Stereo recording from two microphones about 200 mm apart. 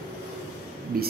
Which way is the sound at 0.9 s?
50° right (ahead or behind).